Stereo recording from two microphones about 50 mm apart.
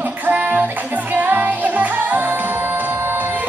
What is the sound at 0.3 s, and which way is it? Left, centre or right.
Music, right.